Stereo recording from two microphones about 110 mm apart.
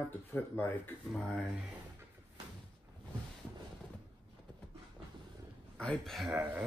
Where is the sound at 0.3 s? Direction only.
20° left (ahead or behind).